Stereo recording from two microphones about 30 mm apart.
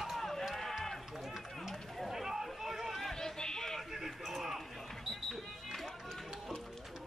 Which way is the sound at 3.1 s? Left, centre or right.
Left.